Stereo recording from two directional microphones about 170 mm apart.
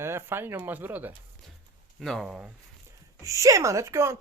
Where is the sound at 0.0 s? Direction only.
15° right (ahead or behind).